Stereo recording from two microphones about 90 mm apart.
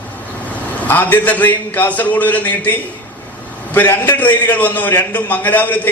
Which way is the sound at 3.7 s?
25° left (ahead or behind).